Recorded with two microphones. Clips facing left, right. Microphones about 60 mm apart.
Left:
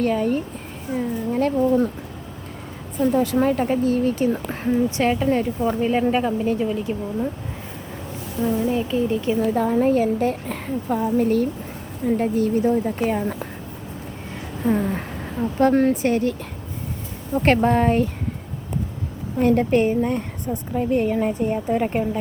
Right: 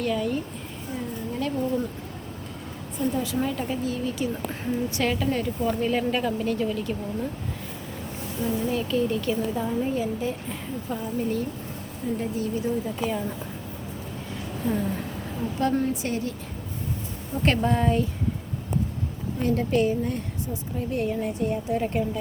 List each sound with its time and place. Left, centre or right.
0.0 s a woman's voice: left
0.9 s speech: left
1.3 s speech: left
3.0 s a woman's voice: left
4.9 s speech: left
8.7 s speech: left
9.6 s a woman's voice: left
14.7 s a woman's voice: left
17.4 s a woman's voice: left
19.4 s a woman's voice: left